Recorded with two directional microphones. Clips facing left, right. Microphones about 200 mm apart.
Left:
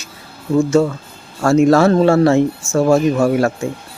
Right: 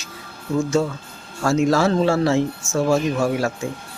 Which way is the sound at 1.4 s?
55° left (ahead or behind).